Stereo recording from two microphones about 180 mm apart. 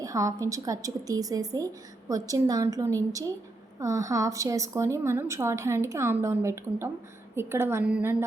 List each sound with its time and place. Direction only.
0.0 s a woman's voice: 20° right (ahead or behind)